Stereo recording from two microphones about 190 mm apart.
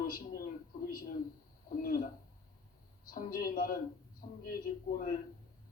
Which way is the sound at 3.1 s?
50° left (ahead or behind).